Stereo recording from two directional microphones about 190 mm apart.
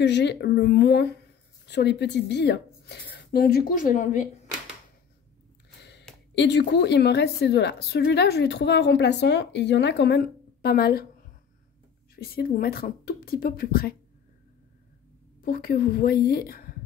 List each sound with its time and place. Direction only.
0.0 s a woman's voice: 65° left (ahead or behind); by 4.3 s 40° left (ahead or behind)
5.8 s a sound: 60° left (ahead or behind)
6.3 s a woman's voice: 65° left (ahead or behind)
12.2 s speech: 50° left (ahead or behind)
15.4 s speech: 50° left (ahead or behind)